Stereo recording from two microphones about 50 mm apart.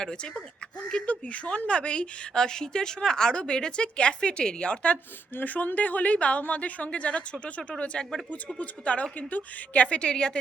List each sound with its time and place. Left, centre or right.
0.0 s a woman's voice: centre
5.3 s a woman's voice: left; by 8.2 s centre
8.5 s a woman's voice: left